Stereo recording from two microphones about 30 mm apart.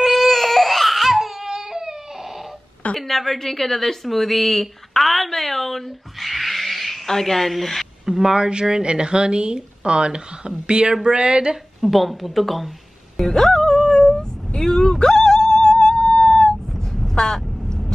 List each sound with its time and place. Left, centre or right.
0.0 s baby cry: centre
1.4 s a sound: centre
3.0 s a woman's voice: centre
7.1 s a woman's voice: centre
8.2 s speech: right
11.8 s a woman's voice: centre
13.2 s music: centre
15.9 s a sound: left
16.2 s a sound: left